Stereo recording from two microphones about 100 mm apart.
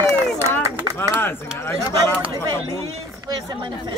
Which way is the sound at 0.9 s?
25° left (ahead or behind).